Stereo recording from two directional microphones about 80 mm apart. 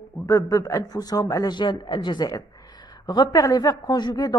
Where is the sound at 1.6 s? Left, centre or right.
Left.